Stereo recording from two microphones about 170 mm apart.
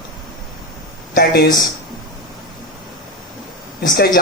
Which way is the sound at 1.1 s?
65° left (ahead or behind).